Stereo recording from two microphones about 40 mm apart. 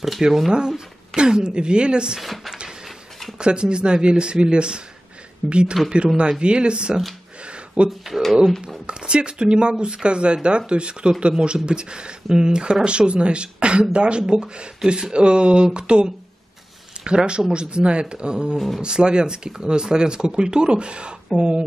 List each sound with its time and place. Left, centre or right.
0.5 s speech: centre
2.1 s speech: centre
3.3 s speech: right
7.4 s a sound: right
8.5 s speech: centre
8.8 s speech: right